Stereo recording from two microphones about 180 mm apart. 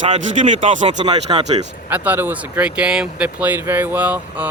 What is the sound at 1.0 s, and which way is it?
Speech, 25° right (ahead or behind).